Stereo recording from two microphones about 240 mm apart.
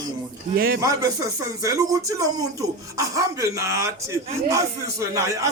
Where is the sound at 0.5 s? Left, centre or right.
Right.